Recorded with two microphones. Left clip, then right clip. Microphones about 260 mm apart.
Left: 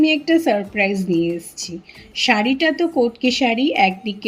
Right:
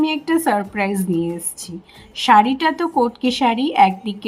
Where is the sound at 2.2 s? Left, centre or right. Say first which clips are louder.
Right 5 dB; right.